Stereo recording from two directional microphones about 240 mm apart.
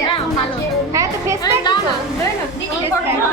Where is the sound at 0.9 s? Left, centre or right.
Centre.